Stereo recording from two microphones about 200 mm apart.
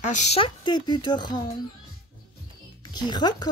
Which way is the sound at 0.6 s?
20° left (ahead or behind).